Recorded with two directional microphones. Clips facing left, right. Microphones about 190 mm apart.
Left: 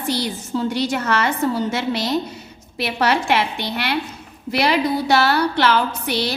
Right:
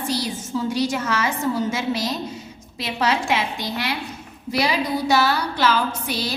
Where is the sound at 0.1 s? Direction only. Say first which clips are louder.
Left 4 dB; 65° left (ahead or behind).